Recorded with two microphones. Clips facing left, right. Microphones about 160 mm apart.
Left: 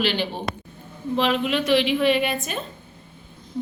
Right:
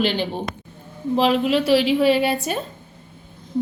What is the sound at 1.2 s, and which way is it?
Speech, 35° right (ahead or behind).